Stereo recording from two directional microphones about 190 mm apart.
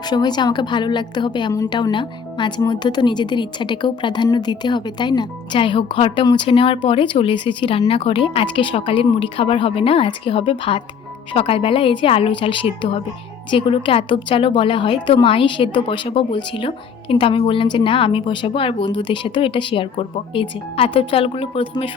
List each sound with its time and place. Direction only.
0.1 s a woman's voice: 20° left (ahead or behind)